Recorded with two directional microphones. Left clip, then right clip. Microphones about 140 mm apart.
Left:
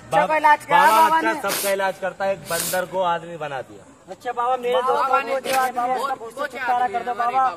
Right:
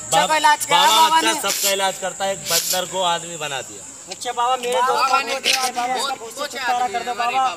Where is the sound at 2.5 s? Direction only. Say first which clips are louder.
Right 2 dB; 5° left (ahead or behind).